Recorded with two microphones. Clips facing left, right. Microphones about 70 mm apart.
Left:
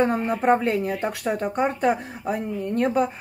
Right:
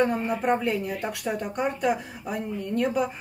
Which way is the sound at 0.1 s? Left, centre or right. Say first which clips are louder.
Left 4 dB; left.